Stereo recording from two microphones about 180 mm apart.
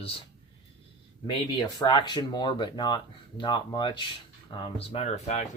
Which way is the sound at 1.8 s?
25° left (ahead or behind).